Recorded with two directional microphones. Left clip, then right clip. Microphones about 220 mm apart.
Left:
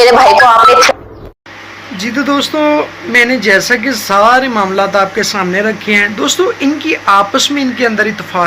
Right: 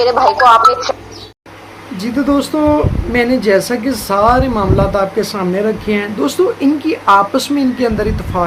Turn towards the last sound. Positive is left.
turn(degrees=-5)  # may be behind; listen again after turning